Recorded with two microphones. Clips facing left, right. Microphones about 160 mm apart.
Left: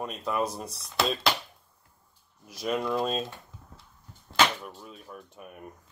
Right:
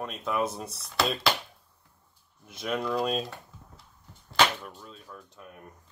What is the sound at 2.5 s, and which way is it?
Speech, centre (ahead or behind).